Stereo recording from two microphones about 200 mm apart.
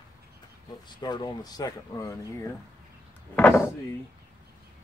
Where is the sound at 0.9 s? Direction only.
20° left (ahead or behind).